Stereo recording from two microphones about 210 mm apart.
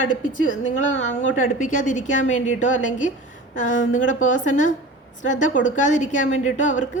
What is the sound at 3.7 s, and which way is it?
Speech, 70° left (ahead or behind).